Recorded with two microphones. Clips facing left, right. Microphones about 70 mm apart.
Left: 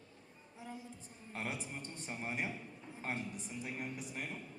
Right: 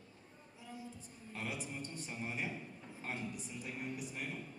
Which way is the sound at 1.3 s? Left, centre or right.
Left.